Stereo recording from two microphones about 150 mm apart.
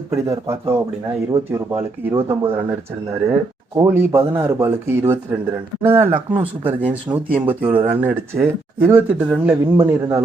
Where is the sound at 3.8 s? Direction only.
15° right (ahead or behind).